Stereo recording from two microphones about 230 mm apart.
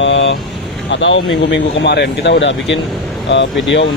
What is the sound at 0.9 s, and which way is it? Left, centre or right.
Speech, left.